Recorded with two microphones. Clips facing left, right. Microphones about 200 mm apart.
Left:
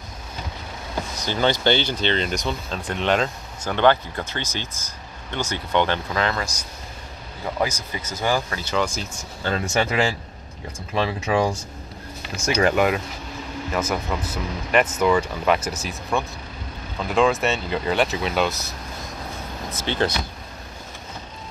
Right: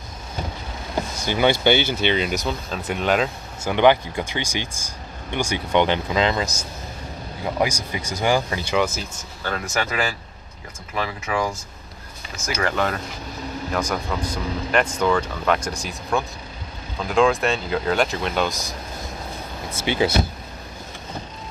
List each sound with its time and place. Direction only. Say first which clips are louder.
1.2 s speech: right 2 dB; 10° right (ahead or behind)
9.4 s speech: left 3 dB; 20° left (ahead or behind)
12.4 s speech: left 4 dB; 15° left (ahead or behind)
19.7 s speech: right 2 dB; 10° right (ahead or behind)